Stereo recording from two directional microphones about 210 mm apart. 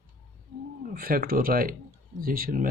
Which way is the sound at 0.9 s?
45° right (ahead or behind).